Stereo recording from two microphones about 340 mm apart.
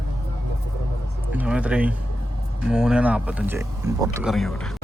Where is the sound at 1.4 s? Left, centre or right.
Centre.